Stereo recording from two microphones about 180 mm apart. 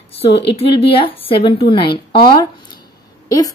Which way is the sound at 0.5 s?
30° left (ahead or behind).